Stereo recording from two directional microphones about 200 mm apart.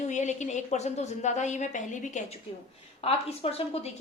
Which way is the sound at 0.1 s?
35° left (ahead or behind).